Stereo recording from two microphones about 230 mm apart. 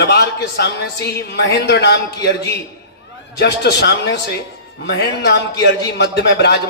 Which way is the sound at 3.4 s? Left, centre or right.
Left.